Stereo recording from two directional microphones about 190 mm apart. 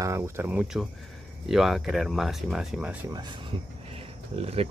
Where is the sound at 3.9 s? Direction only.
30° right (ahead or behind).